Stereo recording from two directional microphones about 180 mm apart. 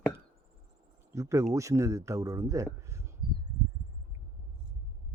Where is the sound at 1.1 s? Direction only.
15° right (ahead or behind).